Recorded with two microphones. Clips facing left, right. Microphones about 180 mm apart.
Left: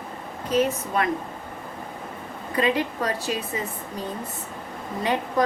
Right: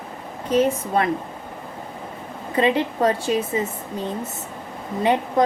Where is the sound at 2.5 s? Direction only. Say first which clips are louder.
Right 4 dB; 25° right (ahead or behind).